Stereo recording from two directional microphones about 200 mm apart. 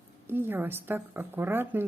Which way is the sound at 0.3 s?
10° right (ahead or behind).